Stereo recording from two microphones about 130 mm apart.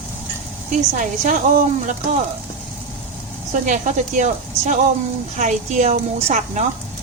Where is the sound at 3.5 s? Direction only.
75° right (ahead or behind).